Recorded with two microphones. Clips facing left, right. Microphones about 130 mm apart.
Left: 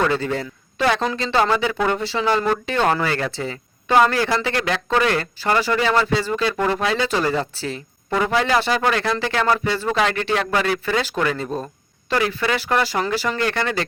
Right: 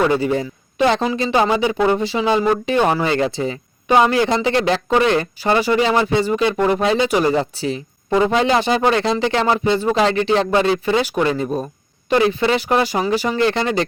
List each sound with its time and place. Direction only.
0.0 s a man's voice: 15° right (ahead or behind)